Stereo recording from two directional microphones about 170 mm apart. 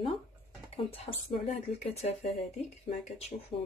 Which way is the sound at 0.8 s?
35° left (ahead or behind).